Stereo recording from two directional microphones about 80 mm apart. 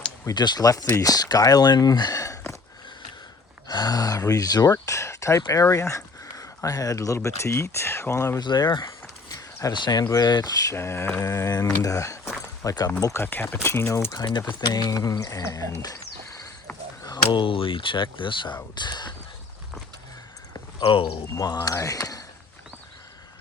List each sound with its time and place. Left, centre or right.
0.3 s speech: left
3.7 s speech: left
8.4 s speech: left
10.7 s speech: left
12.6 s speech: left
13.2 s speech: left
14.7 s speech: left
17.3 s speech: left
18.7 s speech: left
20.8 s speech: left
21.4 s speech: left